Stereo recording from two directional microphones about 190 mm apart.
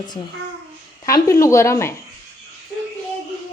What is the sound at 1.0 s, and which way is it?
Speech, 15° left (ahead or behind).